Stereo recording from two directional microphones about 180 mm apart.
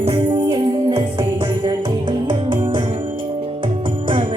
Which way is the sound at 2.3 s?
25° right (ahead or behind).